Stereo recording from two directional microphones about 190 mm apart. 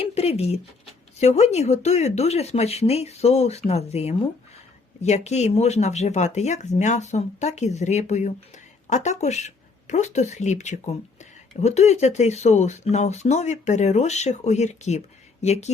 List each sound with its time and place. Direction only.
0.1 s speech: 35° left (ahead or behind)